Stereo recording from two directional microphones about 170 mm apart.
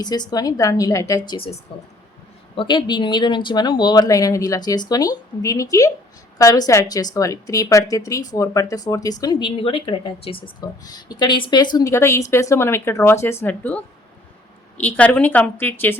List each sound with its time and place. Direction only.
0.0 s speech: 25° left (ahead or behind)
2.6 s a woman's voice: 25° left (ahead or behind); by 15.7 s 10° left (ahead or behind)